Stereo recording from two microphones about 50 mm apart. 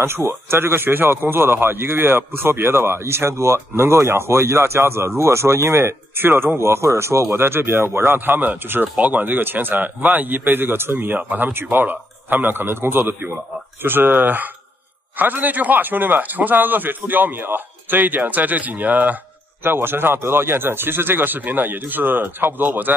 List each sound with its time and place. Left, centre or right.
0.0 s speech: right
6.6 s speech: right
7.2 s speech: right
19.6 s speech: right